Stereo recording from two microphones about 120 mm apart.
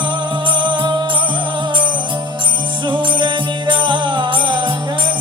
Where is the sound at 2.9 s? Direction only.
40° right (ahead or behind).